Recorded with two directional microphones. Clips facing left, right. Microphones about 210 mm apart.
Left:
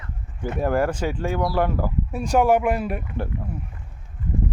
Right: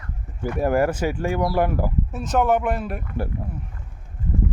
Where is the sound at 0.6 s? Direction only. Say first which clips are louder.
Right 2 dB; 10° right (ahead or behind).